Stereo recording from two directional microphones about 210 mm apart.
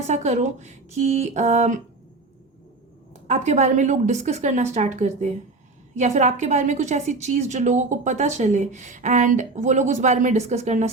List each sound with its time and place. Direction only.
0.1 s a woman's voice: 35° right (ahead or behind)
3.1 s a woman's voice: 30° right (ahead or behind)